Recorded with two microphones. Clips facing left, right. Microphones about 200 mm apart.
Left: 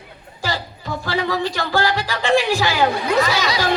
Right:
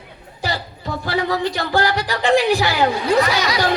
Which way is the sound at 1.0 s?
20° right (ahead or behind).